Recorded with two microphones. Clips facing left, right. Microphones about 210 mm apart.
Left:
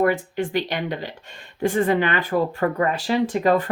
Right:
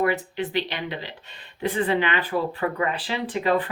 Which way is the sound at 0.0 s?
45° left (ahead or behind).